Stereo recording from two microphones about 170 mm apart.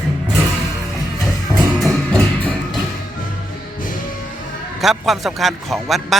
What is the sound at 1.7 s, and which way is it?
Music, centre (ahead or behind).